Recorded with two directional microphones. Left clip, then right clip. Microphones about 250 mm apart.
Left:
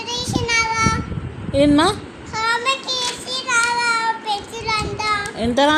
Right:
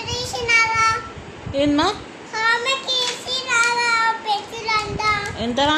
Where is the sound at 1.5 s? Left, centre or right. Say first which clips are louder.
Left 4 dB; centre.